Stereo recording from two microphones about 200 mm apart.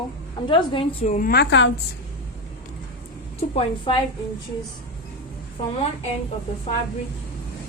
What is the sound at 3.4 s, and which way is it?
Speech, 25° left (ahead or behind).